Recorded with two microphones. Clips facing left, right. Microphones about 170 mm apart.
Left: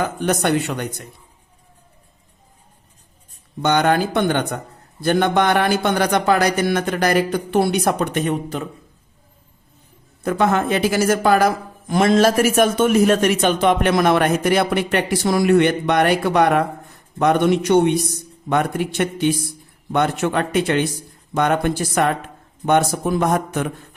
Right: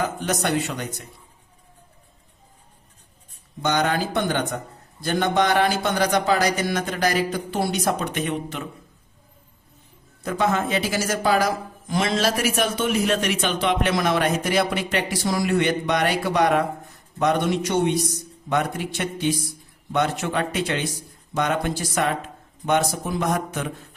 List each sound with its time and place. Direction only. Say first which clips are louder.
0.2 s speech: left 5 dB; 55° left (ahead or behind)
3.6 s speech: left 5 dB; 60° left (ahead or behind); by 8.6 s 40° left (ahead or behind)
10.2 s a man's voice: left 5 dB; 55° left (ahead or behind)